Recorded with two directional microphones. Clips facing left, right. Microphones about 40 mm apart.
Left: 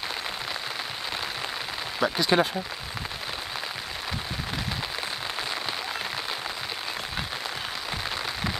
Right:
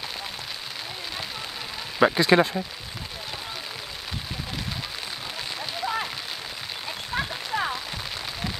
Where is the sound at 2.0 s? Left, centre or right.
Right.